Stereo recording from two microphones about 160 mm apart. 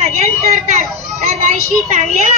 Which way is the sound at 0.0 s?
45° right (ahead or behind).